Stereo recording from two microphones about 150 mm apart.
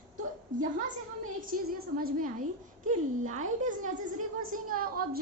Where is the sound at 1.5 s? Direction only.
75° right (ahead or behind).